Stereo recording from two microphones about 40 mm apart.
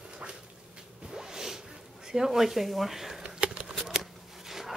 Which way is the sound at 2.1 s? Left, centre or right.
Centre.